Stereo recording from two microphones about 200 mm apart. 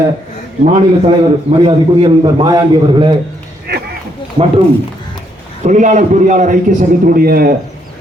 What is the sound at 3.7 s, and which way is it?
Speech, 55° right (ahead or behind).